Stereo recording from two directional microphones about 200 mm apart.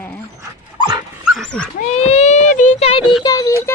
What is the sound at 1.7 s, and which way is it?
Speech, 30° left (ahead or behind).